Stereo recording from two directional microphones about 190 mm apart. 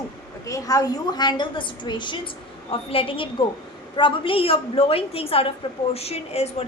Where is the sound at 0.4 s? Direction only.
15° left (ahead or behind).